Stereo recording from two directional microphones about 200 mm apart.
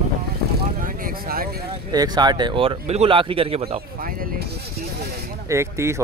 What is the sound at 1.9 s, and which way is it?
Speech, 20° right (ahead or behind).